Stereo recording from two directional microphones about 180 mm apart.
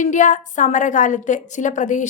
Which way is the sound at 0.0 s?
45° left (ahead or behind).